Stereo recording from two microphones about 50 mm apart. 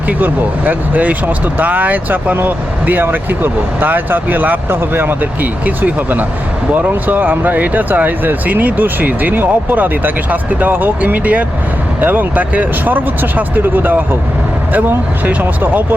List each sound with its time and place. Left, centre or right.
0.2 s speech: right